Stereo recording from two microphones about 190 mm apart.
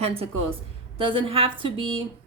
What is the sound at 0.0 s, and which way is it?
A woman's voice, 30° right (ahead or behind).